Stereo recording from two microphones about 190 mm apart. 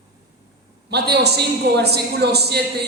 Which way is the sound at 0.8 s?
60° right (ahead or behind).